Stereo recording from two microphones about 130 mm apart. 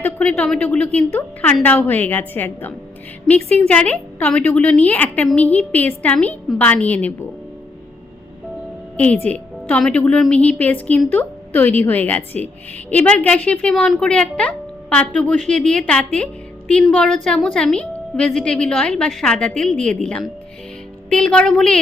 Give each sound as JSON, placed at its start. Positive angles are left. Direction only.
{"t": 0.0, "sound": "a woman's voice", "side_deg": 10}
{"t": 9.3, "sound": "a woman's voice", "side_deg": 10}